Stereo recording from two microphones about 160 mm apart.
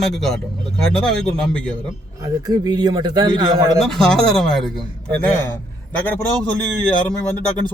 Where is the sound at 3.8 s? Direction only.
5° left (ahead or behind).